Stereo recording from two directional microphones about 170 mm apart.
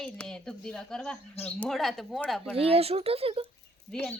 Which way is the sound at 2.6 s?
35° right (ahead or behind).